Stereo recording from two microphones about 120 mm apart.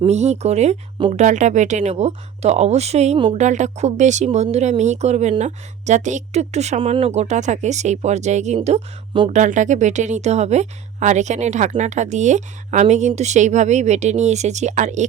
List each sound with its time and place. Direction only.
0.0 s speech: 65° right (ahead or behind)
1.1 s speech: 90° right; by 3.2 s 65° right (ahead or behind)
3.3 s speech: 85° right; by 6.7 s 70° right (ahead or behind)
6.7 s speech: 50° right (ahead or behind); by 8.5 s 75° right (ahead or behind)
8.5 s speech: 65° right (ahead or behind)
9.3 s speech: 90° right